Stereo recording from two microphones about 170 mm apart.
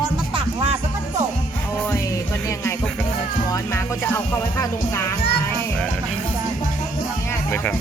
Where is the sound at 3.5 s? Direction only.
15° left (ahead or behind).